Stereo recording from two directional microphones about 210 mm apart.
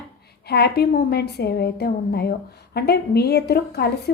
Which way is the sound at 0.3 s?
50° left (ahead or behind).